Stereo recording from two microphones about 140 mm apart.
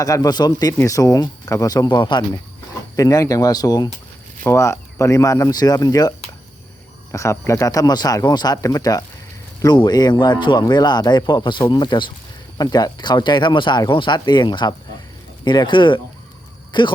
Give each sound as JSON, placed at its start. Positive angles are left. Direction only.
{"t": 0.0, "sound": "speech", "side_deg": 25}